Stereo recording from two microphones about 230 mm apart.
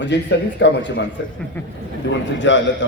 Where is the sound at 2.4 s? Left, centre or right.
Left.